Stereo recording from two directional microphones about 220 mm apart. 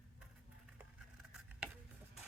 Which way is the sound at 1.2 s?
5° right (ahead or behind).